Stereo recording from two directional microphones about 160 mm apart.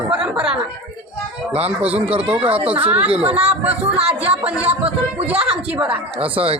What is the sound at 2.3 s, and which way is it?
Speech, 35° right (ahead or behind).